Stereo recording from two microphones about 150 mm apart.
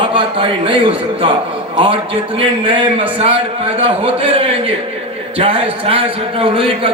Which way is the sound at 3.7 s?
40° right (ahead or behind).